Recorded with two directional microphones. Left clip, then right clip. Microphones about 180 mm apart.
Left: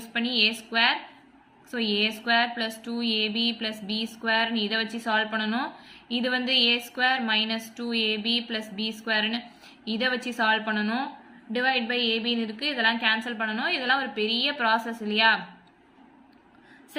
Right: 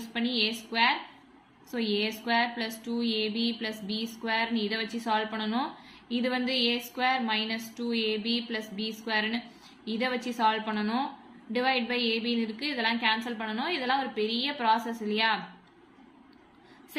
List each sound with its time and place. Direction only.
0.0 s a woman's voice: 15° left (ahead or behind)